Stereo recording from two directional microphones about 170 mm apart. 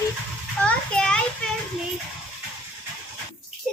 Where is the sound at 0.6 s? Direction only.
5° left (ahead or behind).